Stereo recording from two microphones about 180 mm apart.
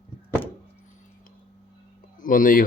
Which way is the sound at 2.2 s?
50° left (ahead or behind).